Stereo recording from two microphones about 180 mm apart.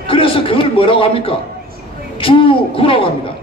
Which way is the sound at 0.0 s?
30° left (ahead or behind).